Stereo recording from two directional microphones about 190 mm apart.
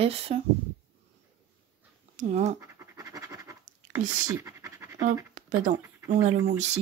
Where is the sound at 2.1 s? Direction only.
35° right (ahead or behind).